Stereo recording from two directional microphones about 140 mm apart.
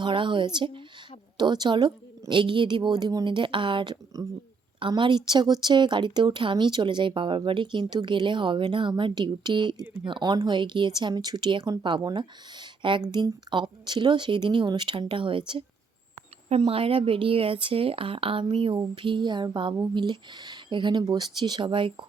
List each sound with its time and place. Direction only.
0.0 s speech: 35° right (ahead or behind)
9.8 s speech: 10° right (ahead or behind)
10.1 s speech: 30° right (ahead or behind)